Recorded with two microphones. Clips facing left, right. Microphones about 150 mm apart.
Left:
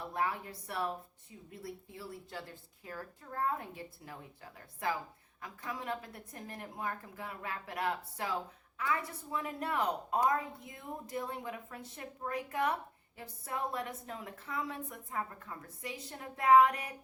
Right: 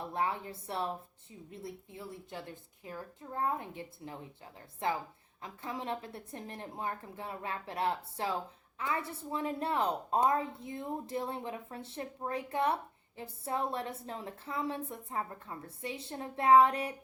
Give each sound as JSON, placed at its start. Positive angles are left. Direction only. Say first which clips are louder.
{"t": 0.1, "sound": "a woman's voice", "louder": "right 1 dB", "side_deg": -25}